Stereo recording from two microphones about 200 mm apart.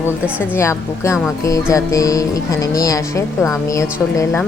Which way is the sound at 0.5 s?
15° left (ahead or behind).